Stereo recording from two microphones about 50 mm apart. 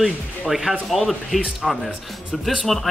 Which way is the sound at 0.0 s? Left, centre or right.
Centre.